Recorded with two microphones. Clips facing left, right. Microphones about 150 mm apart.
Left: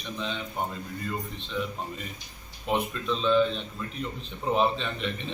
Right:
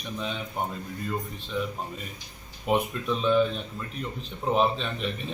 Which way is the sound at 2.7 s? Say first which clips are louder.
Right 2 dB; 10° right (ahead or behind).